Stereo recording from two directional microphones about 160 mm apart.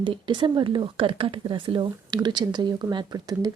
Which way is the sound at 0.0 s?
30° right (ahead or behind).